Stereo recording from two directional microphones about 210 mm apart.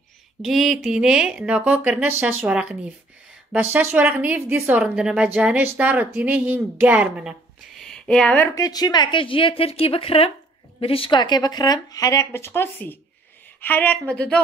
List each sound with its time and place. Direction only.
0.4 s a woman's voice: centre (ahead or behind)